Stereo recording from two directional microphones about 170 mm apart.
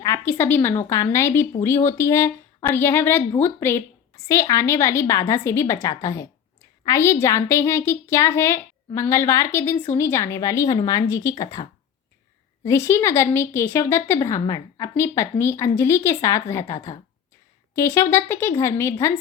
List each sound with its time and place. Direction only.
0.0 s a woman's voice: 15° left (ahead or behind)